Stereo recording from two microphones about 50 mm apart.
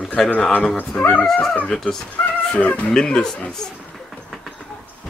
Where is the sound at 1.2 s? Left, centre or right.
Centre.